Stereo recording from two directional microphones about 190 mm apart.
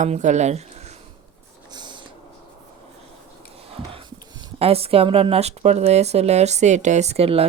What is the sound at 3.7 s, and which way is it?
Speech, 30° right (ahead or behind).